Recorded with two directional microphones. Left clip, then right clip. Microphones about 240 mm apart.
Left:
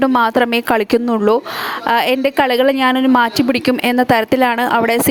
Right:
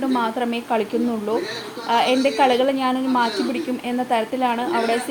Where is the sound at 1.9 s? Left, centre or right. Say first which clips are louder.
Left 3 dB; left.